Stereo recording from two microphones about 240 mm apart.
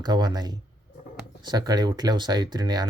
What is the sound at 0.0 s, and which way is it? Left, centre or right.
Speech, centre.